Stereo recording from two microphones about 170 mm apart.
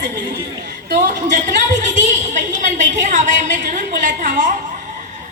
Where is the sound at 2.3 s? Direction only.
45° right (ahead or behind).